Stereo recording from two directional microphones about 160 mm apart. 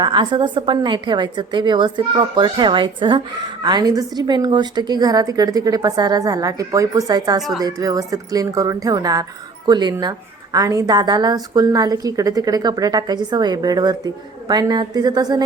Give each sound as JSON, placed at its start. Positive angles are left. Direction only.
{"t": 0.0, "sound": "a woman's voice", "side_deg": -30}